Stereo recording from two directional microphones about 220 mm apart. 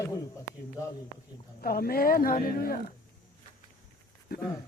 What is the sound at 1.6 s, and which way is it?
A woman's voice, 45° left (ahead or behind).